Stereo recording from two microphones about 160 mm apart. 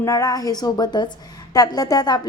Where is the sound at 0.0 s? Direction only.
20° left (ahead or behind).